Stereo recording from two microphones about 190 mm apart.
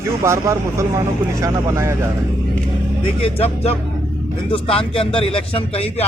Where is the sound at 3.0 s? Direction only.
30° left (ahead or behind).